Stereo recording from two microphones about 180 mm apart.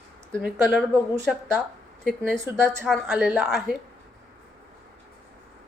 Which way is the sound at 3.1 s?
10° right (ahead or behind).